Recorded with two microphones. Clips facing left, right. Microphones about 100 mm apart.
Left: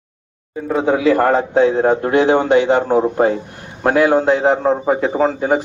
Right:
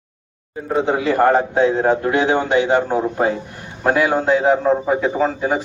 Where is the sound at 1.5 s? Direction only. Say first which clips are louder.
Left 2 dB; 65° left (ahead or behind).